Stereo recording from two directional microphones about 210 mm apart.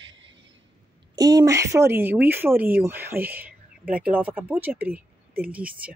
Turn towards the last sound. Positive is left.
turn(degrees=-5)  # may be behind; listen again after turning